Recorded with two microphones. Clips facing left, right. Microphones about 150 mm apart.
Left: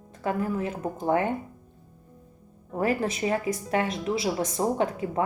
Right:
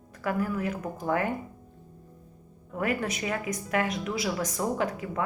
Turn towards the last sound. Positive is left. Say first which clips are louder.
# left 3 dB
turn(degrees=30)  # may be behind; listen again after turning